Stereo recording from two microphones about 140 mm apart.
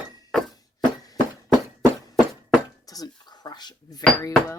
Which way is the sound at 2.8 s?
25° left (ahead or behind).